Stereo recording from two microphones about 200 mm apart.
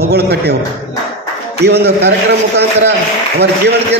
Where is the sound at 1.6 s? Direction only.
55° right (ahead or behind).